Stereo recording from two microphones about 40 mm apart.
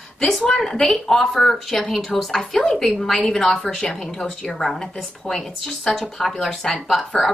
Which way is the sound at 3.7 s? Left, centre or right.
Centre.